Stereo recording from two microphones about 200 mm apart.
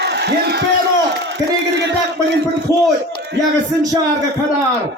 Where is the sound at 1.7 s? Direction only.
60° right (ahead or behind).